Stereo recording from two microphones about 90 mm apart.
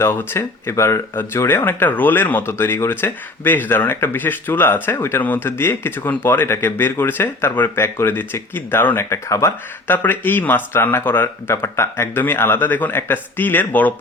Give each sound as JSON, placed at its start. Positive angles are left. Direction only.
{"t": 0.0, "sound": "speech", "side_deg": 25}
{"t": 9.9, "sound": "speech", "side_deg": 20}